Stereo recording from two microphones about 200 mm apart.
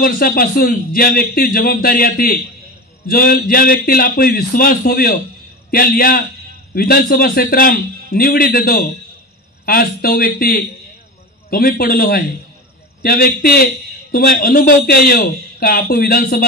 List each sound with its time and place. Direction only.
0.0 s a man's voice: 50° left (ahead or behind)